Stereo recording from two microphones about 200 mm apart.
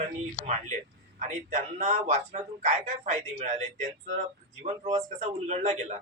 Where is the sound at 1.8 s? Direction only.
35° right (ahead or behind).